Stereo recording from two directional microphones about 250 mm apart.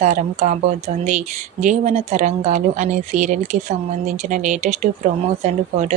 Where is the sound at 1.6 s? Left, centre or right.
Right.